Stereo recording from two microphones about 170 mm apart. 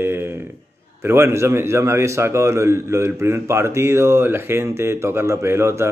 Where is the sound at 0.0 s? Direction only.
15° right (ahead or behind).